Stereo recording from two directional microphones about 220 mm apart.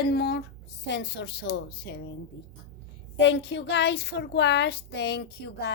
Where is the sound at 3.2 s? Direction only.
50° left (ahead or behind).